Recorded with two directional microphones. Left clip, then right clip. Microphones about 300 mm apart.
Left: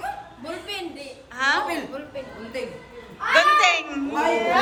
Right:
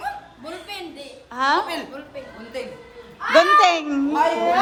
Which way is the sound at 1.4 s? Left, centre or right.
Centre.